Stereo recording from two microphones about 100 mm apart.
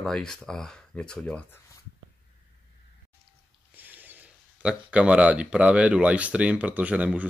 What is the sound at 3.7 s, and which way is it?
Speech, 20° right (ahead or behind).